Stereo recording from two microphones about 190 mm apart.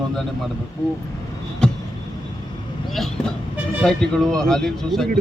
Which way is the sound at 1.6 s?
5° left (ahead or behind).